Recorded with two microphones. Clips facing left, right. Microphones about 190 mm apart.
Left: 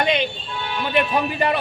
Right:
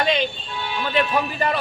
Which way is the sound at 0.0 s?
20° left (ahead or behind).